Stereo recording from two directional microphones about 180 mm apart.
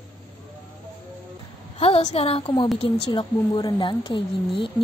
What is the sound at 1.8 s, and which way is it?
A woman's voice, 35° left (ahead or behind).